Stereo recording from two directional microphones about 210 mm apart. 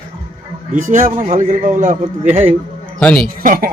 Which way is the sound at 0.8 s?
35° right (ahead or behind).